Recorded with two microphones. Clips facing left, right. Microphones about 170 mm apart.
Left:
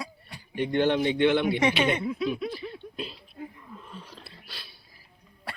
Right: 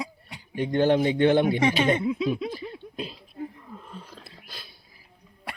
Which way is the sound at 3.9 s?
45° right (ahead or behind).